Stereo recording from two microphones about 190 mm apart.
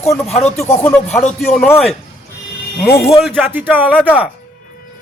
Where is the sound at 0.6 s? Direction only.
10° left (ahead or behind).